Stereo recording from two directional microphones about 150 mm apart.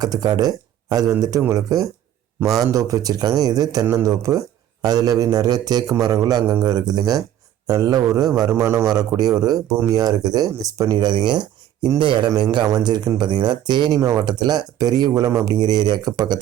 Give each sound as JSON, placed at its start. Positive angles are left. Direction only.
{"t": 0.0, "sound": "speech", "side_deg": -25}